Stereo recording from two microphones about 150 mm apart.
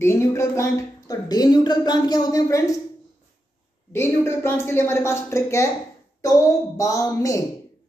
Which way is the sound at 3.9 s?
15° left (ahead or behind).